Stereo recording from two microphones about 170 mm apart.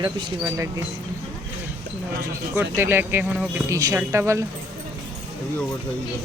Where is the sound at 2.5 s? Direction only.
15° right (ahead or behind).